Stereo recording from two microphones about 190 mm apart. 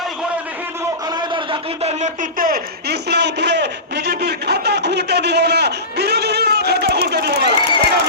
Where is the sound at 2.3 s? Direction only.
50° right (ahead or behind).